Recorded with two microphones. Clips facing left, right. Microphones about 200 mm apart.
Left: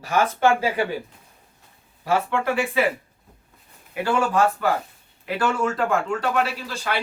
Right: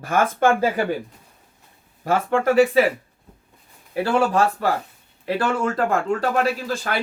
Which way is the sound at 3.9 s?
35° right (ahead or behind).